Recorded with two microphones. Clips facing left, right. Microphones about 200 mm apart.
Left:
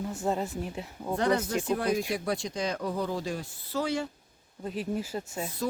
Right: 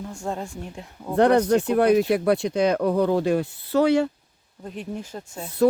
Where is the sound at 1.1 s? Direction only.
65° right (ahead or behind).